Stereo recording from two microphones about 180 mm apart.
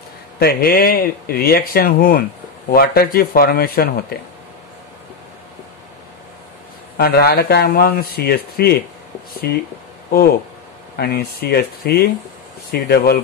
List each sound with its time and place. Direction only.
0.4 s speech: 60° left (ahead or behind)
7.0 s speech: 60° left (ahead or behind)
11.0 s speech: 60° left (ahead or behind)